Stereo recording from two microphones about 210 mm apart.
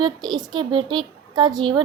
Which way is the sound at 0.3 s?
20° right (ahead or behind).